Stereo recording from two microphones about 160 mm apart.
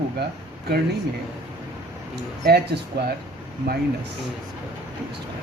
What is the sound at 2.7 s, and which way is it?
Speech, 90° right.